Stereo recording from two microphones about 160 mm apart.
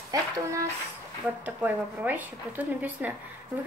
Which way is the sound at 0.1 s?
25° right (ahead or behind).